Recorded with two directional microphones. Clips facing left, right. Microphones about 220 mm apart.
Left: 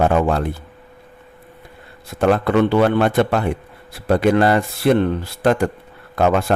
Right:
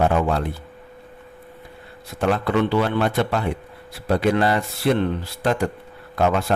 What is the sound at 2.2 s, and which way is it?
A man's voice, 50° left (ahead or behind).